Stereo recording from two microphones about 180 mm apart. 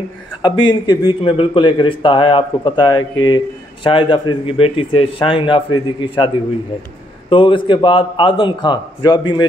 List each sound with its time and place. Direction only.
0.4 s speech: 25° left (ahead or behind)